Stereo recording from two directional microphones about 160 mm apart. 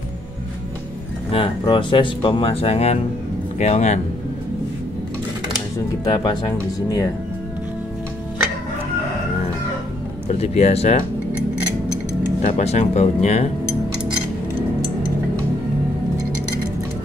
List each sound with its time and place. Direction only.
1.3 s speech: 30° left (ahead or behind); by 4.0 s 45° left (ahead or behind)
6.0 s speech: 25° left (ahead or behind)
10.4 s speech: 40° left (ahead or behind)
12.4 s speech: 50° left (ahead or behind)